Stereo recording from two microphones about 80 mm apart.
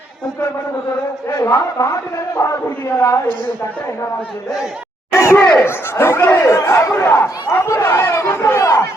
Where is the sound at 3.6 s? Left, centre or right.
Left.